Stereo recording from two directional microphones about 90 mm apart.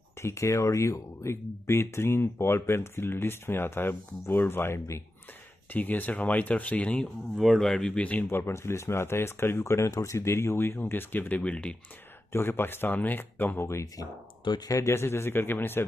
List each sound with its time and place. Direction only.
0.2 s speech: 35° left (ahead or behind)
5.7 s speech: 20° left (ahead or behind)
7.3 s speech: centre (ahead or behind)
12.3 s speech: 25° left (ahead or behind)